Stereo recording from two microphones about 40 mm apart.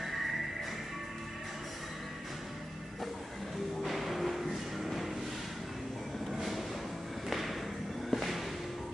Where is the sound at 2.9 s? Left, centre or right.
Centre.